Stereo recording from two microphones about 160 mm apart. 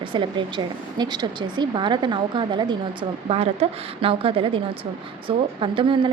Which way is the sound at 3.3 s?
40° right (ahead or behind).